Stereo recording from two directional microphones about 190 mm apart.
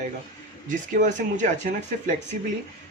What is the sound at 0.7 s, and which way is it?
Speech, 40° right (ahead or behind).